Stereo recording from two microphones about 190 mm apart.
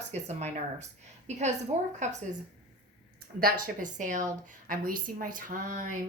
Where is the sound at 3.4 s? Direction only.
50° right (ahead or behind).